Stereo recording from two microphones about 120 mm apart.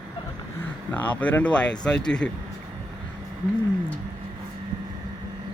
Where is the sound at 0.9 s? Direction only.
15° left (ahead or behind).